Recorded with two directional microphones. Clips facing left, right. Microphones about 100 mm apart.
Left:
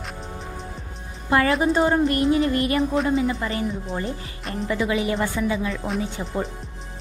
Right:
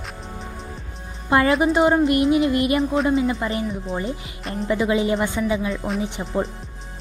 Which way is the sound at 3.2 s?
25° right (ahead or behind).